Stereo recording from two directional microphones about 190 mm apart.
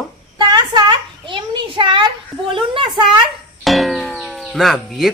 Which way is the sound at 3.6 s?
Centre (ahead or behind).